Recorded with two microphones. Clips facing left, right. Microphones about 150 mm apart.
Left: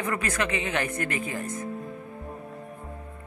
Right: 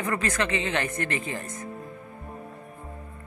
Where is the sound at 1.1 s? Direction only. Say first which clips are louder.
Left 1 dB; 25° right (ahead or behind).